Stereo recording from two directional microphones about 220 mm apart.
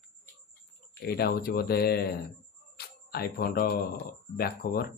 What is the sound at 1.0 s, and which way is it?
Speech, 45° left (ahead or behind).